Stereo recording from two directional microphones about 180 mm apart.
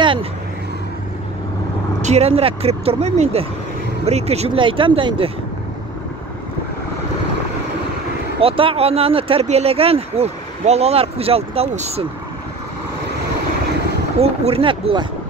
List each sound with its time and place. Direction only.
0.0 s vehicle: 30° right (ahead or behind)
2.0 s speech: 40° right (ahead or behind)
8.4 s speech: 30° right (ahead or behind)
14.1 s speech: 35° right (ahead or behind)